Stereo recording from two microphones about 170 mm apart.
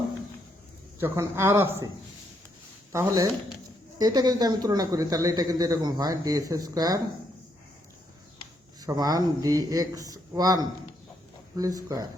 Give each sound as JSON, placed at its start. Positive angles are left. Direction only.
{"t": 0.9, "sound": "a man's voice", "side_deg": -15}
{"t": 2.9, "sound": "a man's voice", "side_deg": -15}
{"t": 8.8, "sound": "speech", "side_deg": -20}